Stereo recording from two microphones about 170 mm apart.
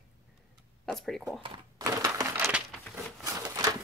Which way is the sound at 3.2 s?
20° right (ahead or behind).